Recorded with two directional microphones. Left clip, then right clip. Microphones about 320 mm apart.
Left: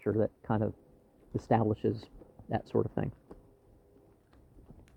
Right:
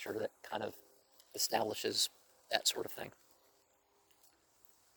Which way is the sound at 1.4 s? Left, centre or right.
Right.